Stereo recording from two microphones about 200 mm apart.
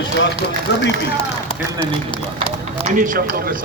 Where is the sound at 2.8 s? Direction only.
40° right (ahead or behind).